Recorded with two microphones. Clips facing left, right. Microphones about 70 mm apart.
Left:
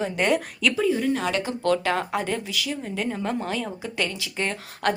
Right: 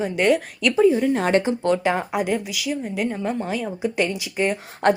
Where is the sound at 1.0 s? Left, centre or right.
Right.